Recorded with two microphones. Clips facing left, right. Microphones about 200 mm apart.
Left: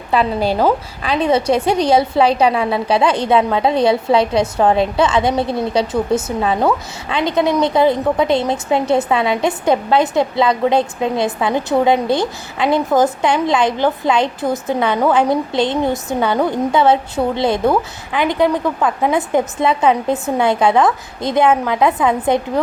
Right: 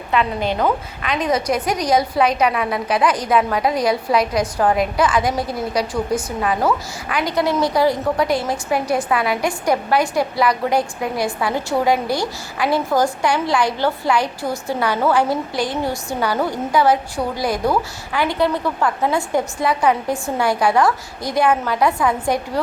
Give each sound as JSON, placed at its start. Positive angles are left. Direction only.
{"t": 0.1, "sound": "a woman's voice", "side_deg": 35}